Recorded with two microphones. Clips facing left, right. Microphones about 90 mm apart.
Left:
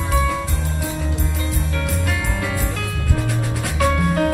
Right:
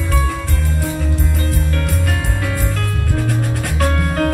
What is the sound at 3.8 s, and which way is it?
Music, 50° right (ahead or behind).